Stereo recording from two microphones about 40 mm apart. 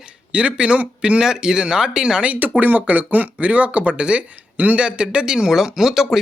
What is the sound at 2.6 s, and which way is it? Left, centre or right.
Speech, right.